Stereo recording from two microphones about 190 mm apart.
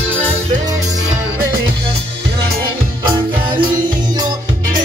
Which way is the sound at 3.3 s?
25° right (ahead or behind).